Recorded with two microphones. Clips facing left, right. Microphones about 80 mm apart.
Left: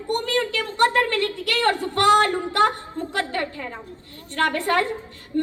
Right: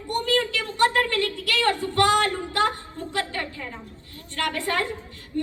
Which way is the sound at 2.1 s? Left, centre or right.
Left.